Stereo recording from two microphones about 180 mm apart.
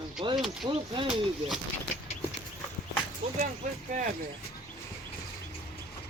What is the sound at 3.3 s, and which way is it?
Speech, 45° right (ahead or behind).